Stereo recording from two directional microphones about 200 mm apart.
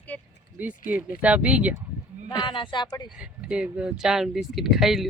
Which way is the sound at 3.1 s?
5° right (ahead or behind).